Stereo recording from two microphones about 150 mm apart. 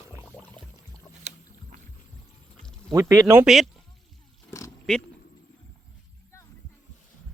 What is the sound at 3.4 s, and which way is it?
Speech, centre (ahead or behind).